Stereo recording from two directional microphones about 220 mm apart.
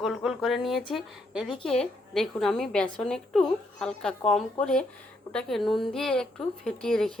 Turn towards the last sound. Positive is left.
turn(degrees=5)  # may be behind; listen again after turning